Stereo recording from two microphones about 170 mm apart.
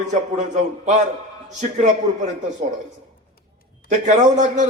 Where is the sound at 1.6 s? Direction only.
45° right (ahead or behind).